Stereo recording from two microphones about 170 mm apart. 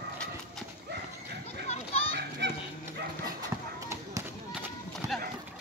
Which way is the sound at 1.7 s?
35° left (ahead or behind).